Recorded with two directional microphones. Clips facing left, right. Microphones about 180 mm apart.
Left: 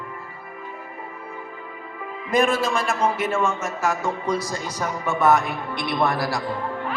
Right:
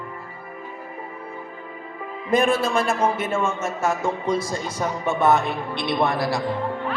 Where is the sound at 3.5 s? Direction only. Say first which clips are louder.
Right 1 dB; 25° right (ahead or behind).